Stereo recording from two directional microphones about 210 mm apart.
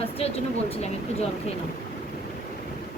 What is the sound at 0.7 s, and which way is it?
Speech, 30° left (ahead or behind).